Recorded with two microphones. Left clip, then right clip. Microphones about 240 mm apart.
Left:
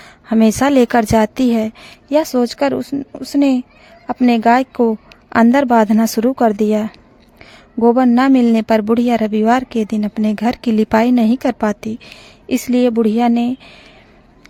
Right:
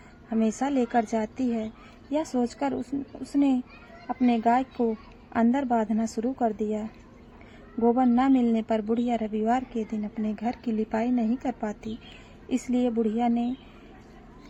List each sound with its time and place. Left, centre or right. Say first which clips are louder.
0.3 s speech: left 14 dB; left